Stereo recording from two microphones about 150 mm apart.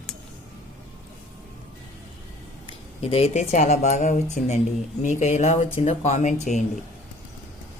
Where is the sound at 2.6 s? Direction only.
40° left (ahead or behind).